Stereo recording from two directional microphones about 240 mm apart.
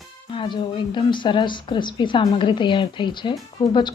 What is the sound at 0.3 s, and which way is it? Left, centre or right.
Speech, centre.